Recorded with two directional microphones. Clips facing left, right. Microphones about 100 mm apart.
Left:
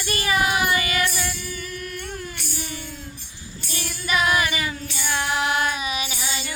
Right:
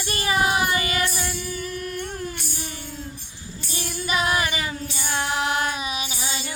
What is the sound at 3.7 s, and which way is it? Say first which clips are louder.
Music: left 1 dB; 25° right (ahead or behind).